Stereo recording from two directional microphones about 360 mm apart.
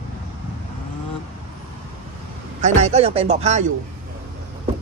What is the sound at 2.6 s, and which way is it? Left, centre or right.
Speech, centre.